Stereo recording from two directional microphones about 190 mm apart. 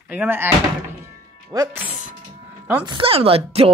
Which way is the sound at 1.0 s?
20° right (ahead or behind).